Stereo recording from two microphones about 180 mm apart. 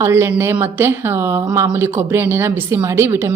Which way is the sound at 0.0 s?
15° right (ahead or behind).